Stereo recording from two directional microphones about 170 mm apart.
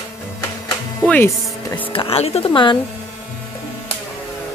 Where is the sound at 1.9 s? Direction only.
35° left (ahead or behind).